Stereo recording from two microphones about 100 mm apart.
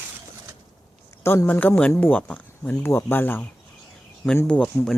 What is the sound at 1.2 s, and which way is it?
Speech, 25° left (ahead or behind).